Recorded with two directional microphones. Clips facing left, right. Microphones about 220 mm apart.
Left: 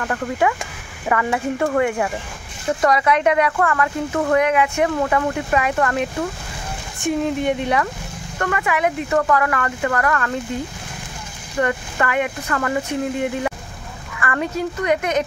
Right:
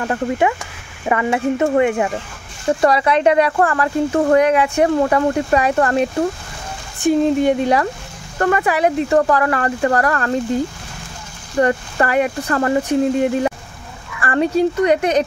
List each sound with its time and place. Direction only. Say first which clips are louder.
0.0 s speech: right 3 dB; 20° right (ahead or behind)
11.6 s speech: right 4 dB; 35° right (ahead or behind)